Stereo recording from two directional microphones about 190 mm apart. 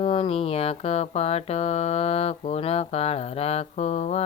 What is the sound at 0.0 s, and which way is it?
Speech, 30° left (ahead or behind).